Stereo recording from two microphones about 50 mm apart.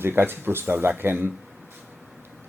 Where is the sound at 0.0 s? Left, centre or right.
Right.